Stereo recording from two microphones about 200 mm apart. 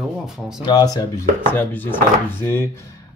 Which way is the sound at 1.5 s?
10° left (ahead or behind).